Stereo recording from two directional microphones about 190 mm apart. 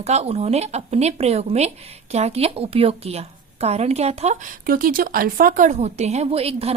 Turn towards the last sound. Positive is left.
turn(degrees=-30)  # may be behind; listen again after turning